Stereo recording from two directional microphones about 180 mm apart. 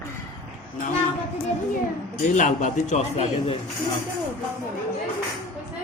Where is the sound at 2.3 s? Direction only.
45° left (ahead or behind).